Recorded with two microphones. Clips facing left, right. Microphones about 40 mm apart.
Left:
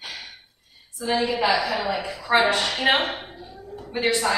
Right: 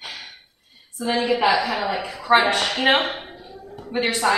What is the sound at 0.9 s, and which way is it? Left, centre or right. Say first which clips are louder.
A woman's voice: right 2 dB; right.